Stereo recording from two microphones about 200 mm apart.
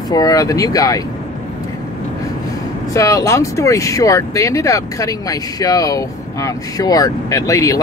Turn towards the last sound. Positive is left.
turn(degrees=15)  # may be behind; listen again after turning